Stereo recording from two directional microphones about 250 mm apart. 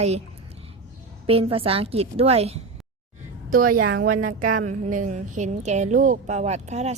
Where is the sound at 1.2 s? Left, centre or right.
Right.